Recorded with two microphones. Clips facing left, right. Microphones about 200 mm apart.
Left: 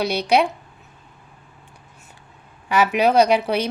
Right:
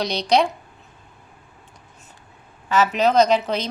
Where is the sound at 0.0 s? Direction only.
10° left (ahead or behind).